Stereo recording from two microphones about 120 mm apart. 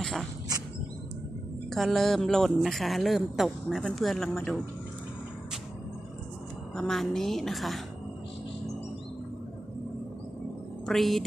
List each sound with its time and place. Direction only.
0.0 s a sound: 5° left (ahead or behind)
1.7 s speech: centre (ahead or behind)
6.7 s speech: 5° left (ahead or behind)
10.9 s speech: centre (ahead or behind)